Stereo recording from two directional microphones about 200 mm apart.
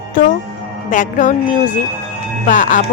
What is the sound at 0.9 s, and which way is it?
Speech, 40° left (ahead or behind).